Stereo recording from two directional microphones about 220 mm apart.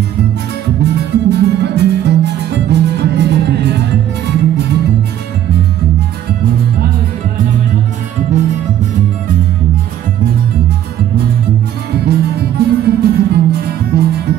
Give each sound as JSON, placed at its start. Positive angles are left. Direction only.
{"t": 0.8, "sound": "music", "side_deg": -50}
{"t": 11.9, "sound": "music", "side_deg": -45}